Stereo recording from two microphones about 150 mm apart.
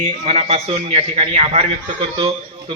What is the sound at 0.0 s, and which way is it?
A man's voice, 45° right (ahead or behind).